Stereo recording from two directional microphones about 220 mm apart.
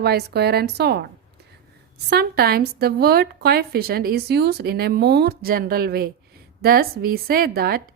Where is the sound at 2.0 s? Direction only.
45° right (ahead or behind).